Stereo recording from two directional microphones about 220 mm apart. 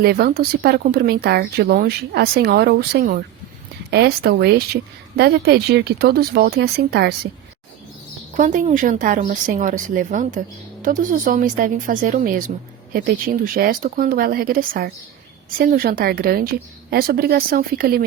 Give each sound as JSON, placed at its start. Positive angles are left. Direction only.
{"t": 0.0, "sound": "speech", "side_deg": -45}
{"t": 8.4, "sound": "a woman's voice", "side_deg": -35}